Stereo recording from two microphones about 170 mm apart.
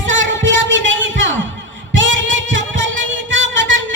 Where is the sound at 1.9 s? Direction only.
90° right.